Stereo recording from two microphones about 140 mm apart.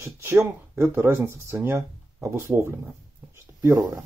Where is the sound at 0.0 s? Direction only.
20° right (ahead or behind).